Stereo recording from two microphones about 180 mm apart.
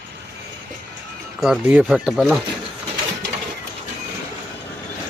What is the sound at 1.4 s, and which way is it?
A man's voice, 5° right (ahead or behind).